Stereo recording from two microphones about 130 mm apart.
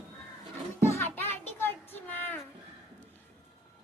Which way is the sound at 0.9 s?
20° left (ahead or behind).